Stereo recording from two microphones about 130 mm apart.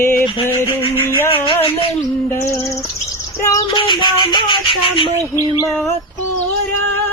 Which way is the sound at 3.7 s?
40° left (ahead or behind).